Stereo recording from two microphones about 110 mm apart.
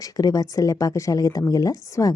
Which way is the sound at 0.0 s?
35° left (ahead or behind).